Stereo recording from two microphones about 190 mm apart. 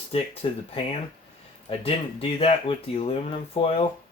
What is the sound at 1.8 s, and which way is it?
Speech, 30° left (ahead or behind).